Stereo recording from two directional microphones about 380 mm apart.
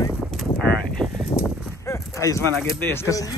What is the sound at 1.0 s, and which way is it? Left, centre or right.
Livestock, centre.